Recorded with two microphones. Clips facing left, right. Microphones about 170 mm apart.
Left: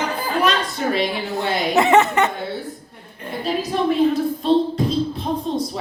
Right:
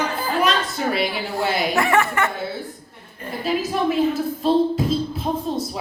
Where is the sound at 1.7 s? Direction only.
20° left (ahead or behind).